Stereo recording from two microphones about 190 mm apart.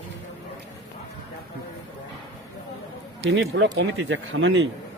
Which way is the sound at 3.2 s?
65° right (ahead or behind).